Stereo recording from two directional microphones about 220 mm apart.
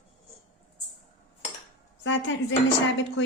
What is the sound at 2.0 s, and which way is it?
Cutlery, 55° left (ahead or behind).